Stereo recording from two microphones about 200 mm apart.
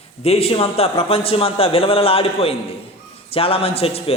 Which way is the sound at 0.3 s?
30° left (ahead or behind).